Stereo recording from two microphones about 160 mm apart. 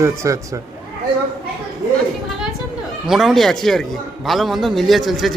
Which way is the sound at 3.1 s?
Centre (ahead or behind).